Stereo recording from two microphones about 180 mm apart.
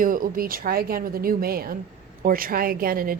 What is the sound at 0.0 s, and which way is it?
Speech, 50° right (ahead or behind).